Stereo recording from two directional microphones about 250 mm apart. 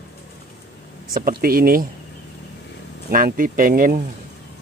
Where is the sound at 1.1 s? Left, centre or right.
Right.